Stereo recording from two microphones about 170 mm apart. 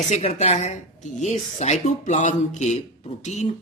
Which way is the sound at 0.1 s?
40° left (ahead or behind).